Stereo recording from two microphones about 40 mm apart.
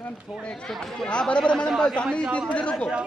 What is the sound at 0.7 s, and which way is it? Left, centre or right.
Speech, centre.